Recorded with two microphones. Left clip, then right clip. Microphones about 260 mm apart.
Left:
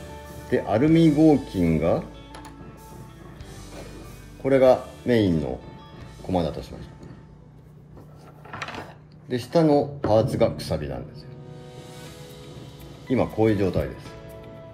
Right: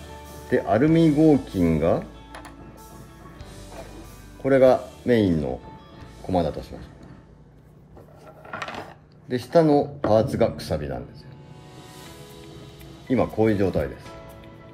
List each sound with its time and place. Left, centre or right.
0.5 s speech: right
4.4 s speech: right
6.2 s speech: right
9.3 s speech: right
13.1 s speech: right